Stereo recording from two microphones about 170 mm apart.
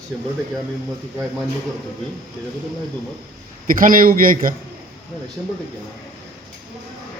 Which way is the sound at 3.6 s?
55° right (ahead or behind).